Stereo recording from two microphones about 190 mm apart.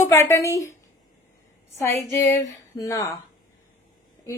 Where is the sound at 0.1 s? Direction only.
15° left (ahead or behind).